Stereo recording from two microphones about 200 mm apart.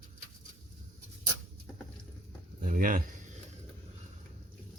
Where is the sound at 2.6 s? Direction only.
40° right (ahead or behind).